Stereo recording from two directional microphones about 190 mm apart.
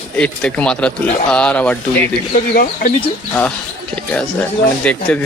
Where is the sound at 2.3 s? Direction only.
45° left (ahead or behind).